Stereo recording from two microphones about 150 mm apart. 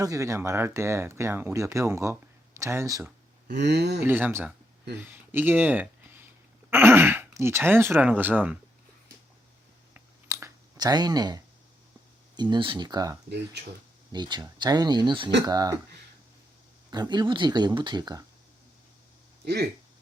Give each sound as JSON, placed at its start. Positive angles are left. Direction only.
{"t": 0.0, "sound": "speech", "side_deg": -20}
{"t": 3.4, "sound": "a sound", "side_deg": -90}
{"t": 4.0, "sound": "speech", "side_deg": -15}
{"t": 9.9, "sound": "a sound", "side_deg": -20}
{"t": 12.3, "sound": "speech", "side_deg": -30}
{"t": 16.9, "sound": "speech", "side_deg": -30}